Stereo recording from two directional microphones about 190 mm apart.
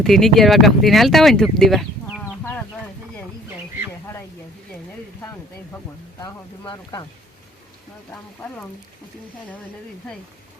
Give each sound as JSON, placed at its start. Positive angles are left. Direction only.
{"t": 0.0, "sound": "speech", "side_deg": 0}
{"t": 6.1, "sound": "speech", "side_deg": 20}